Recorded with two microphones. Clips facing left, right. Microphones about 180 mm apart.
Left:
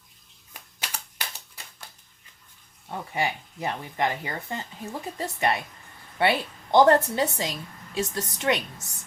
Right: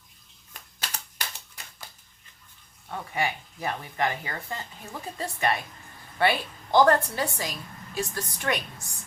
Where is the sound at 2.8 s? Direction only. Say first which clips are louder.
Left 1 dB; 25° left (ahead or behind).